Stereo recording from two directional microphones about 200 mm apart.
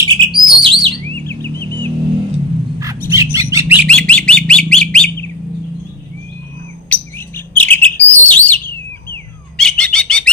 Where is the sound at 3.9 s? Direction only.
5° left (ahead or behind).